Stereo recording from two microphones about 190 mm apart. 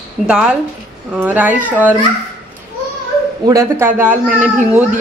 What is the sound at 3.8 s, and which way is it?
Speech, 10° right (ahead or behind).